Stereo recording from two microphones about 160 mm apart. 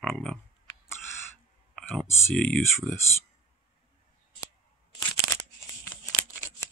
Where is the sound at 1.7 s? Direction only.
5° left (ahead or behind).